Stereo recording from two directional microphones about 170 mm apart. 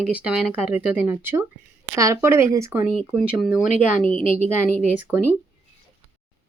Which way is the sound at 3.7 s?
50° left (ahead or behind).